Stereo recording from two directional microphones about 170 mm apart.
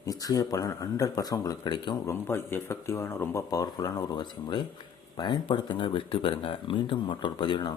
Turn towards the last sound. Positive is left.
turn(degrees=25)  # may be behind; listen again after turning